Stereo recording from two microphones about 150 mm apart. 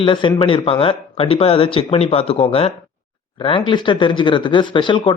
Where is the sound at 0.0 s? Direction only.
35° left (ahead or behind).